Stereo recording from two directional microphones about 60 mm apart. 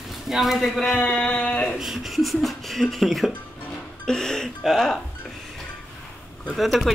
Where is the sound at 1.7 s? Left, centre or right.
Centre.